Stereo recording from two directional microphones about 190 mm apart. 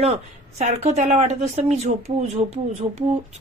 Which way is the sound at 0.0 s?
35° right (ahead or behind).